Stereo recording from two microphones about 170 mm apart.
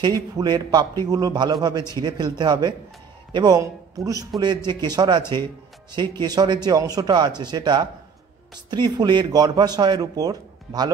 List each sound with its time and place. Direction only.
0.0 s a man's voice: 25° right (ahead or behind)